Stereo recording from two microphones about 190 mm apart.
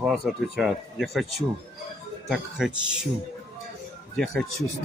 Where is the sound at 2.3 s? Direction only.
5° right (ahead or behind).